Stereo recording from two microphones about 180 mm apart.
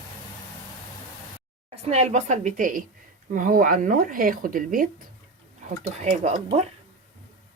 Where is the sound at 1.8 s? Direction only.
35° right (ahead or behind).